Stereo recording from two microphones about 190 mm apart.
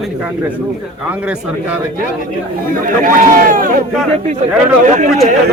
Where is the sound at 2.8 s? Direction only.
45° right (ahead or behind).